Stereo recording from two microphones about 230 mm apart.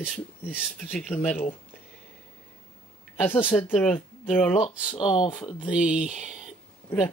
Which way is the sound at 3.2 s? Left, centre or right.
Centre.